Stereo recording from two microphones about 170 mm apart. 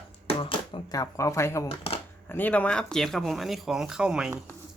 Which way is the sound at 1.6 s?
35° left (ahead or behind).